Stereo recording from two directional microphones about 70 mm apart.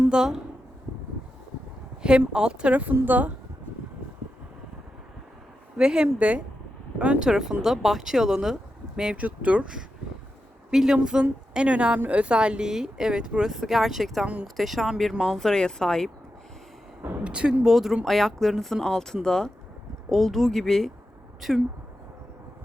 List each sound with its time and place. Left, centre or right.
0.1 s speech: centre
2.0 s speech: centre
5.7 s speech: centre
15.1 s speech: centre
15.4 s speech: centre
17.2 s speech: centre